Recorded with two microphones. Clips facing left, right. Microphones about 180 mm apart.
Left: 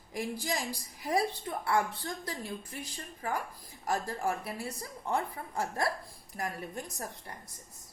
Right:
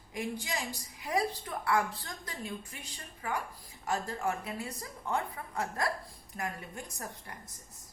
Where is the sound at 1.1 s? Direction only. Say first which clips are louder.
Left 2 dB; 30° left (ahead or behind).